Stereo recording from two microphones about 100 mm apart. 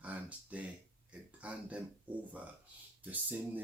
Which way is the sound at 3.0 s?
15° right (ahead or behind).